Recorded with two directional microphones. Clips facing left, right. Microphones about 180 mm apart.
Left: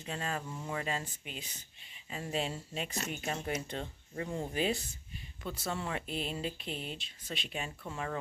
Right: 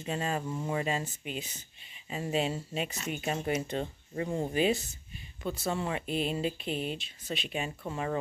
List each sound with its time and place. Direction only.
0.0 s speech: 20° right (ahead or behind)
5.4 s speech: 20° right (ahead or behind)